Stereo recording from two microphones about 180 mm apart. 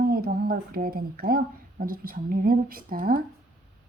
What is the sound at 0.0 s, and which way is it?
Speech, 55° right (ahead or behind).